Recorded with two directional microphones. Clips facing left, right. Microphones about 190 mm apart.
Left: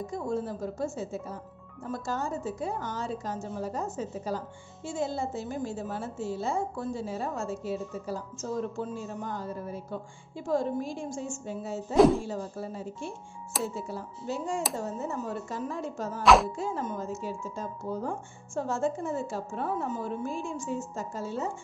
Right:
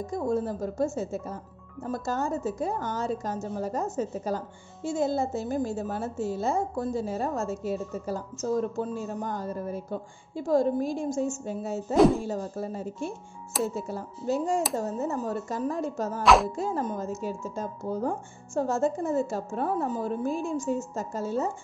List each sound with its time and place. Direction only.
0.0 s a woman's voice: 40° right (ahead or behind)
16.2 s speech: centre (ahead or behind)
16.5 s speech: 40° right (ahead or behind)